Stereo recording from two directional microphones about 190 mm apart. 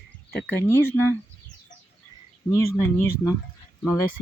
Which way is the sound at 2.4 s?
15° left (ahead or behind).